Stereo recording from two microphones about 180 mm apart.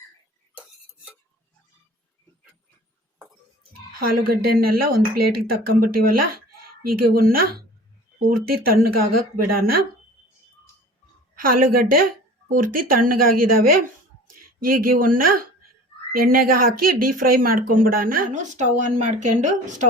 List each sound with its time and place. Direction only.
0.5 s stir: 5° right (ahead or behind)
3.9 s speech: 55° right (ahead or behind)
8.5 s speech: 55° right (ahead or behind)
11.3 s speech: 55° right (ahead or behind)